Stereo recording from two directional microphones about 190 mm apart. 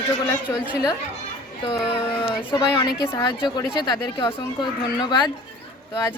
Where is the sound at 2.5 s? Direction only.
25° left (ahead or behind).